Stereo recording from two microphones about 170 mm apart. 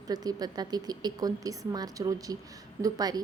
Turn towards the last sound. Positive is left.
turn(degrees=-20)  # may be behind; listen again after turning